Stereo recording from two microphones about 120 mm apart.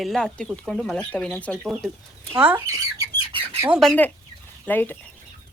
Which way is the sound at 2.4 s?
15° right (ahead or behind).